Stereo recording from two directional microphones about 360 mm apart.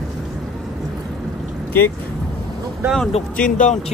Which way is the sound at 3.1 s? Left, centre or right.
Left.